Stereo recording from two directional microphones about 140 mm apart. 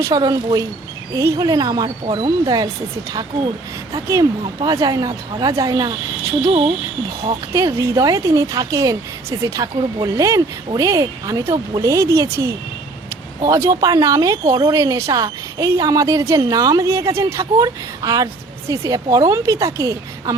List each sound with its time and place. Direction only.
0.0 s a woman's voice: 30° right (ahead or behind)
3.9 s a woman's voice: 25° right (ahead or behind)
6.4 s speech: 40° right (ahead or behind)
7.5 s a woman's voice: 25° right (ahead or behind)